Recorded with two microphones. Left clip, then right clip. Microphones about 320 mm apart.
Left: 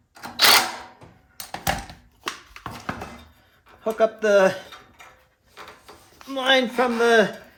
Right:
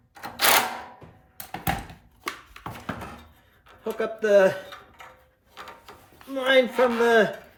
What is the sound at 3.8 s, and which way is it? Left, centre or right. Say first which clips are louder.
Speech: left 6 dB; left.